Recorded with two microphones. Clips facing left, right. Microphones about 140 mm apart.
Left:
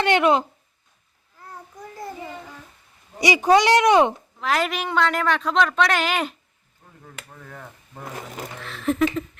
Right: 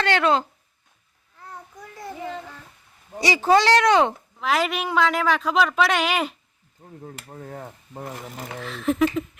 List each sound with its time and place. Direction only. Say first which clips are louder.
0.0 s speech: left 2 dB; 20° left (ahead or behind)
3.2 s speech: left 1 dB; 20° left (ahead or behind)
4.4 s a woman's voice: right 1 dB; centre (ahead or behind)
6.8 s speech: right 5 dB; 35° right (ahead or behind)
8.5 s a woman's voice: right 1 dB; centre (ahead or behind)